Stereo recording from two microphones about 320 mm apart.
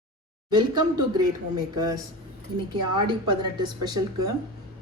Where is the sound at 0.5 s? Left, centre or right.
Centre.